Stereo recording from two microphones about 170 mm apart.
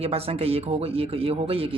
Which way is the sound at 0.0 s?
35° right (ahead or behind).